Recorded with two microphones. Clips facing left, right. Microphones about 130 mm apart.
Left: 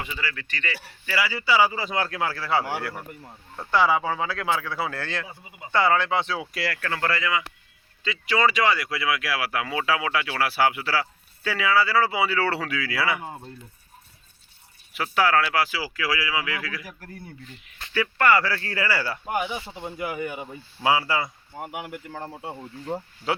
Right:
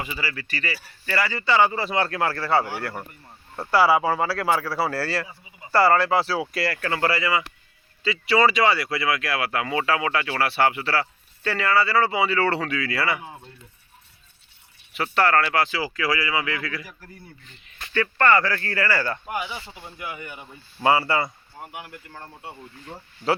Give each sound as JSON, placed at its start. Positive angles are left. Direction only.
{"t": 0.0, "sound": "speech", "side_deg": -10}
{"t": 1.0, "sound": "speech", "side_deg": 5}
{"t": 13.2, "sound": "speech", "side_deg": 40}
{"t": 14.9, "sound": "speech", "side_deg": 0}
{"t": 17.9, "sound": "speech", "side_deg": 10}
{"t": 20.8, "sound": "speech", "side_deg": 0}
{"t": 21.6, "sound": "speech", "side_deg": 70}
{"t": 22.2, "sound": "speech", "side_deg": 35}